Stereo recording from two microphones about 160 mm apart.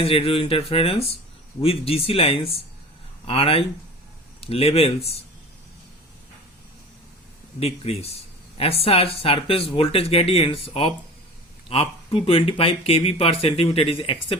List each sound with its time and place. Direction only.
0.0 s speech: 35° left (ahead or behind)
7.6 s speech: 40° left (ahead or behind)